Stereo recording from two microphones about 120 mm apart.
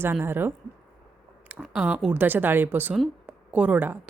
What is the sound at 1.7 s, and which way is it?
Speech, 5° right (ahead or behind).